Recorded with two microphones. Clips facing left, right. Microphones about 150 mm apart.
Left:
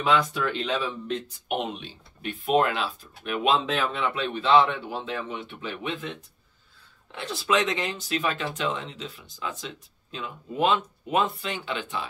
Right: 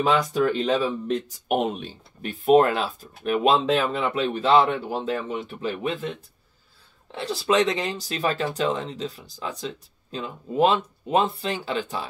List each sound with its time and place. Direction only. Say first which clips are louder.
0.3 s speech: right 6 dB; 40° right (ahead or behind)